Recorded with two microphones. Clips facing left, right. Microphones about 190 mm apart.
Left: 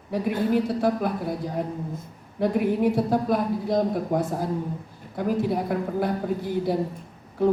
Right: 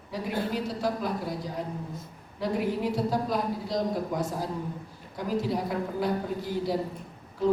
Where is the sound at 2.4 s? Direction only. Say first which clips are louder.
Left 6 dB; 55° left (ahead or behind).